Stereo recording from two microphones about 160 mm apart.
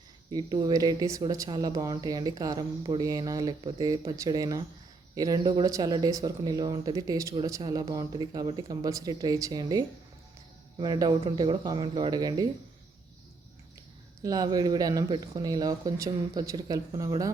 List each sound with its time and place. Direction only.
0.3 s speech: 25° right (ahead or behind)
14.2 s speech: 25° right (ahead or behind)